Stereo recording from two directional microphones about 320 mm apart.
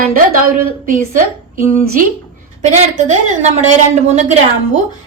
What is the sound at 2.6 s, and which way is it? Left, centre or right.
Speech, right.